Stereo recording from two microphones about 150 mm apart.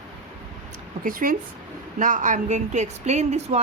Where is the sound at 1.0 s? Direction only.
65° right (ahead or behind).